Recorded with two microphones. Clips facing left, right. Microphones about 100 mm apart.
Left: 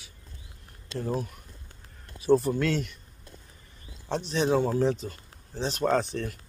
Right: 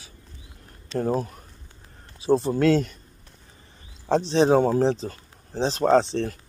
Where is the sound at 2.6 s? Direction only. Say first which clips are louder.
Right 8 dB; 40° right (ahead or behind).